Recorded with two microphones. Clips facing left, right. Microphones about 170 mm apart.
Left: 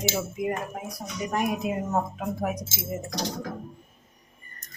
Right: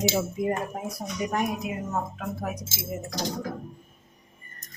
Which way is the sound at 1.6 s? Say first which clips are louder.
Left 4 dB; 30° left (ahead or behind).